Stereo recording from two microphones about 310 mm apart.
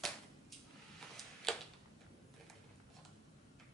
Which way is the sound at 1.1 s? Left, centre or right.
Centre.